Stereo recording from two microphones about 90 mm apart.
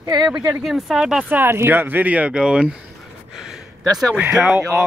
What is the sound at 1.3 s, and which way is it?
Speech, 25° right (ahead or behind).